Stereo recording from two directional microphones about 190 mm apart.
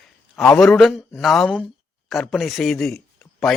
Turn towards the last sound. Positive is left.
turn(degrees=5)  # may be behind; listen again after turning